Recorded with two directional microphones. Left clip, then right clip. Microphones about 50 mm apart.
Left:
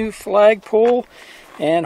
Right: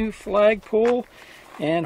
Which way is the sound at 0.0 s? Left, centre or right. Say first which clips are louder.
Left 6 dB; left.